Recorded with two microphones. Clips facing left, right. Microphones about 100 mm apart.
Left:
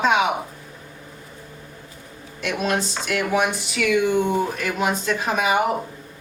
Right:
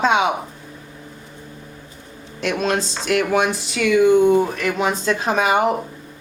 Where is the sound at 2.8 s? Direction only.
5° left (ahead or behind).